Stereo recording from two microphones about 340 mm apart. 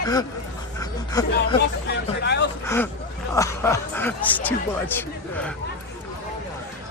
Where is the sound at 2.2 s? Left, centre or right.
Left.